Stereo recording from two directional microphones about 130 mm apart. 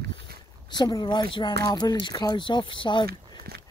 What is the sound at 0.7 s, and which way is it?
Speech, 30° left (ahead or behind).